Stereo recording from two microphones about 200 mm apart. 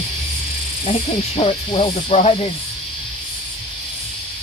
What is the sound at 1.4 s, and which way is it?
Owl, 30° left (ahead or behind).